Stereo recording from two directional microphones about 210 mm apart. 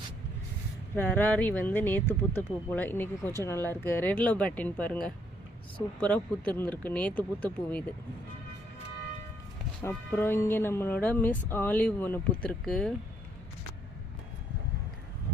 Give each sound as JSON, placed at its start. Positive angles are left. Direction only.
{"t": 0.9, "sound": "speech", "side_deg": 10}
{"t": 9.8, "sound": "speech", "side_deg": 10}